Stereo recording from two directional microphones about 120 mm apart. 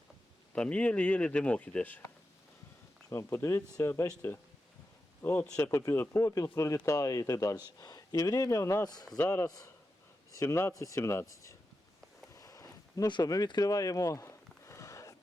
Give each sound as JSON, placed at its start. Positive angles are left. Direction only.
{"t": 0.5, "sound": "speech", "side_deg": 10}
{"t": 3.1, "sound": "speech", "side_deg": 20}
{"t": 5.2, "sound": "speech", "side_deg": 15}
{"t": 5.5, "sound": "speech", "side_deg": 25}
{"t": 9.1, "sound": "speech", "side_deg": 20}
{"t": 12.3, "sound": "a sound", "side_deg": 25}
{"t": 13.1, "sound": "speech", "side_deg": 35}